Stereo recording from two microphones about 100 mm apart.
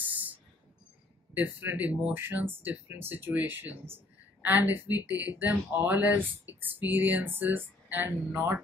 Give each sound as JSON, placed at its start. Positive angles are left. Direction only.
{"t": 1.3, "sound": "speech", "side_deg": -20}